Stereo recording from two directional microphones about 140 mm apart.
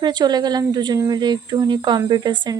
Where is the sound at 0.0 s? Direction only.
30° right (ahead or behind).